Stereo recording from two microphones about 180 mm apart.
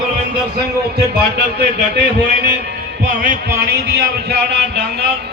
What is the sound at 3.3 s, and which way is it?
A man's voice, 60° right (ahead or behind).